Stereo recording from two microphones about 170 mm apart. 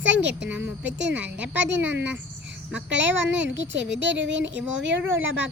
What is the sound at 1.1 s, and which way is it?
Speech, 5° right (ahead or behind).